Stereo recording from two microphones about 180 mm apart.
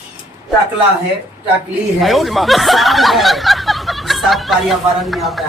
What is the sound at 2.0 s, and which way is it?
Speech, centre (ahead or behind).